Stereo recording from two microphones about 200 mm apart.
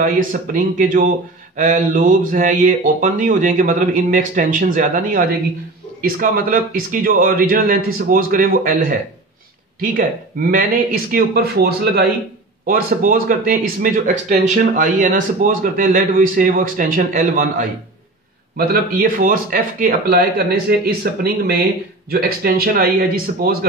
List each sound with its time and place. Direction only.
0.0 s speech: 40° right (ahead or behind)
22.1 s speech: 50° right (ahead or behind)